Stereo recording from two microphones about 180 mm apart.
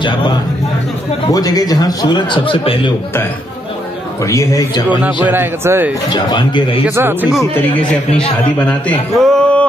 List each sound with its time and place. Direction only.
1.2 s a man's voice: 20° left (ahead or behind)
4.2 s a man's voice: 15° left (ahead or behind)
5.0 s a man's voice: 10° right (ahead or behind)
6.0 s a man's voice: 25° left (ahead or behind)
7.0 s a man's voice: 10° right (ahead or behind)
8.5 s a man's voice: 10° left (ahead or behind)
9.1 s a sound: centre (ahead or behind)